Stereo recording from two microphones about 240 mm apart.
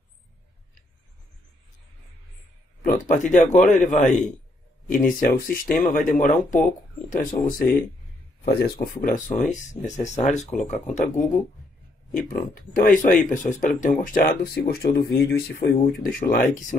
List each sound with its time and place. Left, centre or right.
2.8 s speech: left
12.1 s speech: left